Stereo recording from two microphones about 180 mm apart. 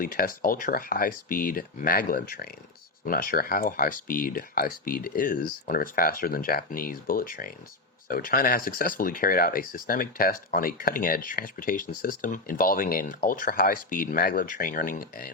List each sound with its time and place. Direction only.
0.0 s speech: 50° left (ahead or behind)